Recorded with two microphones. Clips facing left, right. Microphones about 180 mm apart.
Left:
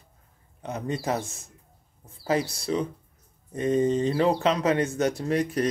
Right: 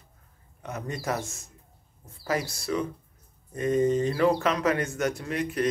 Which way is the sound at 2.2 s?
30° left (ahead or behind).